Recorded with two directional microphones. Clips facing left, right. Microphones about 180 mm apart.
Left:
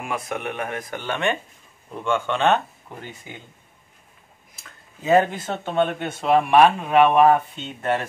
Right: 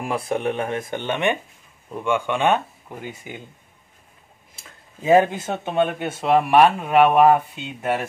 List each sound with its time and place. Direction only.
0.0 s a man's voice: 30° right (ahead or behind); by 3.2 s 10° right (ahead or behind)
5.0 s a man's voice: 10° right (ahead or behind)